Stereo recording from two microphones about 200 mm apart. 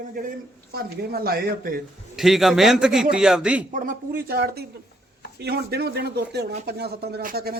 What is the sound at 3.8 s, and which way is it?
Speech, 45° right (ahead or behind).